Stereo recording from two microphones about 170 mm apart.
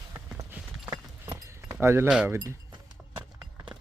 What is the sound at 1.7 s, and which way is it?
Speech, 15° right (ahead or behind).